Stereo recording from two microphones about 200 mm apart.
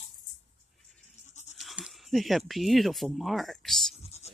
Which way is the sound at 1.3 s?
35° left (ahead or behind).